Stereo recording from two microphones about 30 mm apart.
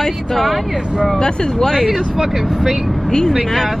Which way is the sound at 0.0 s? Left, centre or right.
Centre.